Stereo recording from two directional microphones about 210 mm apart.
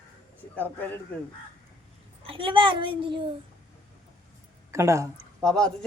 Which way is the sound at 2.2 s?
25° right (ahead or behind).